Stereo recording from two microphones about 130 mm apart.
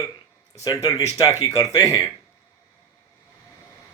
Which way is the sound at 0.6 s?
25° left (ahead or behind).